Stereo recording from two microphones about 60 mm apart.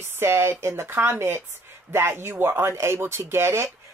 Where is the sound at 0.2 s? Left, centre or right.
Right.